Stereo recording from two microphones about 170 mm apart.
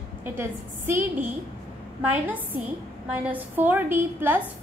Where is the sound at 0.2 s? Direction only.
10° right (ahead or behind).